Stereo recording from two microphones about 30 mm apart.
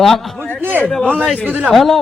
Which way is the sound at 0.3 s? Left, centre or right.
Left.